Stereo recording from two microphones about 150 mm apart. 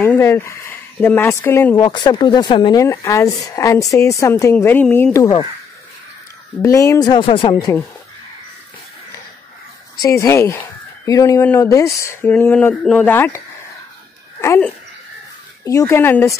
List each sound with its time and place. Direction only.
0.0 s speech: 15° left (ahead or behind)
1.9 s speech: 30° left (ahead or behind)
2.8 s speech: 20° left (ahead or behind)
5.1 s speech: 20° left (ahead or behind)
6.6 s speech: 20° left (ahead or behind)
10.0 s speech: 20° left (ahead or behind)
15.6 s speech: 20° left (ahead or behind)